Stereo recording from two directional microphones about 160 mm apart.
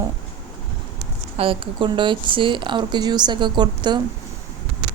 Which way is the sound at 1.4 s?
35° right (ahead or behind).